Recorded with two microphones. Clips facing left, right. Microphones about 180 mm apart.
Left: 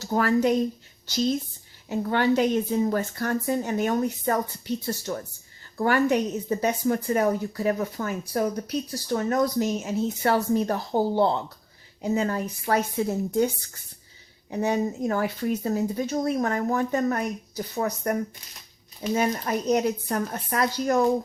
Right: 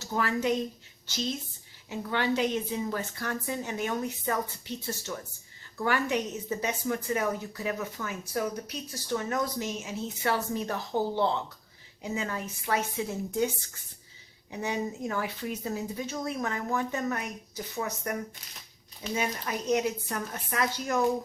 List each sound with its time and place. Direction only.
0.0 s speech: 40° left (ahead or behind)
14.5 s speech: 45° left (ahead or behind)